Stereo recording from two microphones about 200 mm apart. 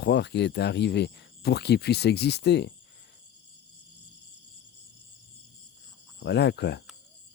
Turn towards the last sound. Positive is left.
turn(degrees=55)  # may be behind; listen again after turning